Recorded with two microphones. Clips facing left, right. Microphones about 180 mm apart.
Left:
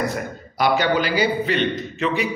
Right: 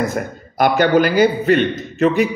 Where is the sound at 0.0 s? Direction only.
50° right (ahead or behind).